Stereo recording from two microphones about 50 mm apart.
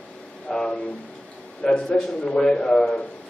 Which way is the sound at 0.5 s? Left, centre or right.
Centre.